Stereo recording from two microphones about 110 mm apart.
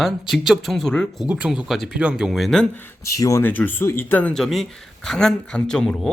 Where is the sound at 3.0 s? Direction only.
30° left (ahead or behind).